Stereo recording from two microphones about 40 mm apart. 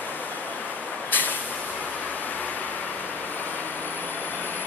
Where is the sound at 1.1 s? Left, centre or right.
Left.